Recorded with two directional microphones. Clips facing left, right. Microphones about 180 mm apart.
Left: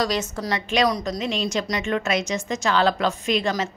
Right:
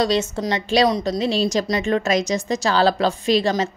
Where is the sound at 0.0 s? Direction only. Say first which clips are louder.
Right 5 dB; 25° right (ahead or behind).